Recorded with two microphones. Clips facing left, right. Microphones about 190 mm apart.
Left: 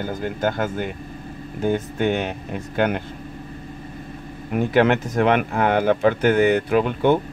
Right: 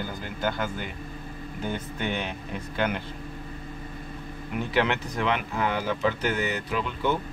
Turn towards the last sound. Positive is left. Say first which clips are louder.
# left 10 dB
turn(degrees=55)  # may be behind; listen again after turning